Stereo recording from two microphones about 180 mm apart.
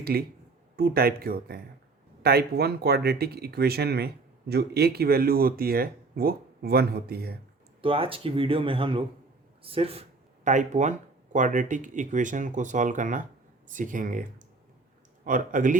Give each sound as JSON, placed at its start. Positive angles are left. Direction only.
{"t": 0.0, "sound": "speech", "side_deg": -60}
{"t": 7.8, "sound": "speech", "side_deg": -30}